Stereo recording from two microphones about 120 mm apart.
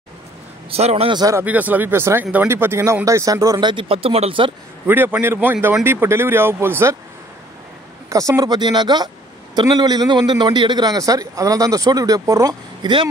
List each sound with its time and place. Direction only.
0.7 s a man's voice: 60° right (ahead or behind)
1.1 s a man's voice: 30° right (ahead or behind)
1.4 s a man's voice: 15° right (ahead or behind); by 4.5 s 50° right (ahead or behind)
4.8 s speech: 15° right (ahead or behind)
8.1 s a man's voice: 25° right (ahead or behind)